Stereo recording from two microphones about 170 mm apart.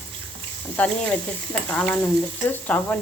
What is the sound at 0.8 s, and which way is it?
Speech, 10° left (ahead or behind).